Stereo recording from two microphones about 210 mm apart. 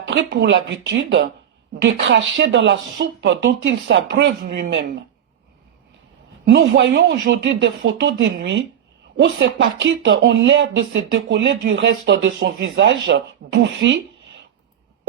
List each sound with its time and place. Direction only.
0.0 s speech: 60° right (ahead or behind)
6.4 s speech: 55° right (ahead or behind)